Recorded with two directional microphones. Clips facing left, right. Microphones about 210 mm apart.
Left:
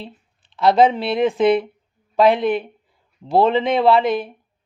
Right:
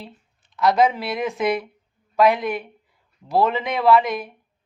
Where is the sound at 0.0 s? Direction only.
30° left (ahead or behind).